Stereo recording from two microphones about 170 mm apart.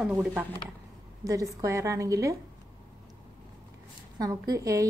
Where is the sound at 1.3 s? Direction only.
20° right (ahead or behind).